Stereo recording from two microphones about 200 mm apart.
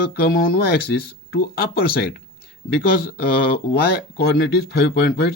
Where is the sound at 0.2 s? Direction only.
50° left (ahead or behind).